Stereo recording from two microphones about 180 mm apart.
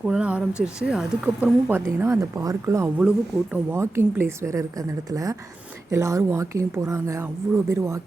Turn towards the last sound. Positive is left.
turn(degrees=-15)  # may be behind; listen again after turning